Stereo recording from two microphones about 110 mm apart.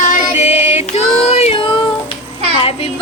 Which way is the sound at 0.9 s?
75° left (ahead or behind).